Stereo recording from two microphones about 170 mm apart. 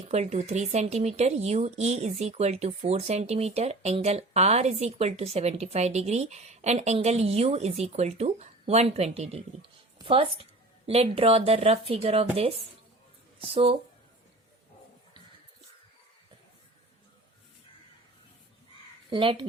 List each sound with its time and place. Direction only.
0.1 s speech: 40° right (ahead or behind)
19.1 s speech: 30° right (ahead or behind)